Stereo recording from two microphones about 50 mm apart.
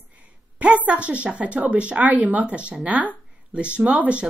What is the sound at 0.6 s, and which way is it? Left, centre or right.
A woman's voice, right.